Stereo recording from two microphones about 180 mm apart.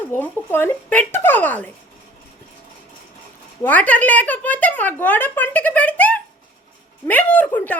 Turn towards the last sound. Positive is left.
turn(degrees=10)  # may be behind; listen again after turning